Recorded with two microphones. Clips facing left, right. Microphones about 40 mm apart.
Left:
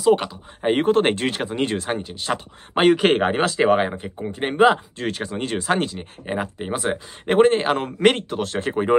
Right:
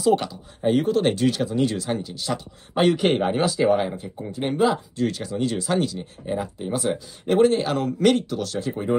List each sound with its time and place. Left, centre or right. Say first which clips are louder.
0.0 s speech: left 2 dB; centre
0.6 s speech: left 2 dB; left
3.1 s speech: left 2 dB; left